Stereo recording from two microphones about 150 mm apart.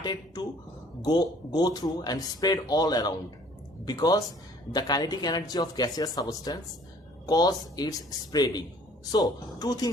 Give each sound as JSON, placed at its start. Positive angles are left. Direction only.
{"t": 0.0, "sound": "speech", "side_deg": 25}